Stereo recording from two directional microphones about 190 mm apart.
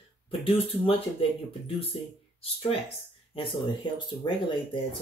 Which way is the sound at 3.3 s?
25° left (ahead or behind).